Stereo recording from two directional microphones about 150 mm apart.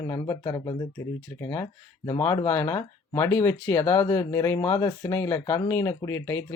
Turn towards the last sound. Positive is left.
turn(degrees=20)  # may be behind; listen again after turning